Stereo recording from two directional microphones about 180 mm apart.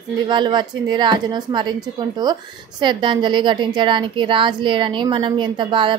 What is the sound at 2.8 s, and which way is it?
A woman's voice, 25° right (ahead or behind).